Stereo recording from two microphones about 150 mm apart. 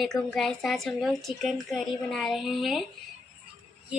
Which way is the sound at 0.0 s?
Centre (ahead or behind).